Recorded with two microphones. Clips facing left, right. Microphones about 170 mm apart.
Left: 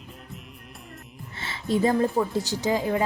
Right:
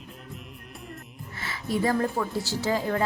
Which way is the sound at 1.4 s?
25° left (ahead or behind).